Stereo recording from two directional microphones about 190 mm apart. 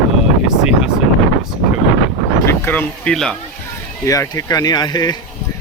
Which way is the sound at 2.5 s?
10° left (ahead or behind).